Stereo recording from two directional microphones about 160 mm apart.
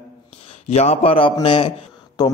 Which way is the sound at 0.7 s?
40° left (ahead or behind).